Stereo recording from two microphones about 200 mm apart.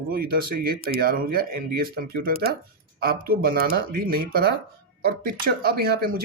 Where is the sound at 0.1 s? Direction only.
45° right (ahead or behind).